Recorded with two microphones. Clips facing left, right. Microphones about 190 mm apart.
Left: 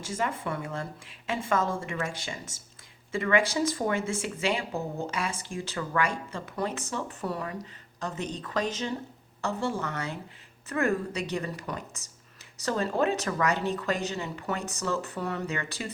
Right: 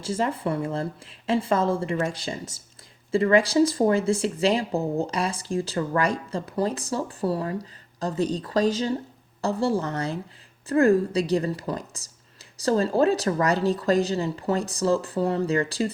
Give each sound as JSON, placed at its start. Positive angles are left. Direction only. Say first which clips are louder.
{"t": 0.0, "sound": "speech", "louder": "right 6 dB", "side_deg": -35}